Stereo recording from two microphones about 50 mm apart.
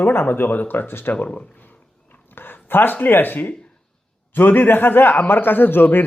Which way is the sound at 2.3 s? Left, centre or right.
Left.